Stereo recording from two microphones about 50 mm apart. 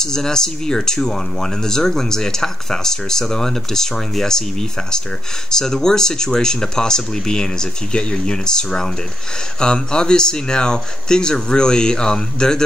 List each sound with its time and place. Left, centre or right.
0.0 s speech: centre